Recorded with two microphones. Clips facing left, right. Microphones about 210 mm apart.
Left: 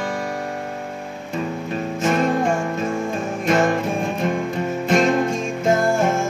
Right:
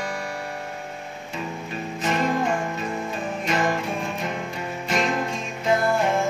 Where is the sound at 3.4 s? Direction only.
45° left (ahead or behind).